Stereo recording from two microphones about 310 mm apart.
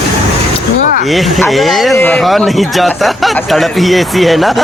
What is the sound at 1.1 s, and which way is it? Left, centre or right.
Speech, centre.